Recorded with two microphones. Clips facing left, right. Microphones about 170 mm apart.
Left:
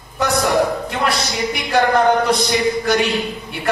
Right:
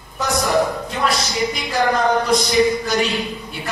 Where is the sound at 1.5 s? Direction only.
60° left (ahead or behind).